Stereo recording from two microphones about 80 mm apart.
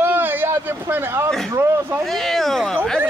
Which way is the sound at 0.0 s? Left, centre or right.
Right.